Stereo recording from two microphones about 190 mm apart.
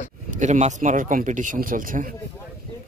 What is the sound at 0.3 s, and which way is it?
Speech, 40° right (ahead or behind).